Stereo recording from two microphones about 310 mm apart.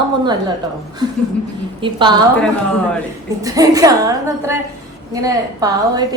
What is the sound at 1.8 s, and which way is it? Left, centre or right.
Speech, centre.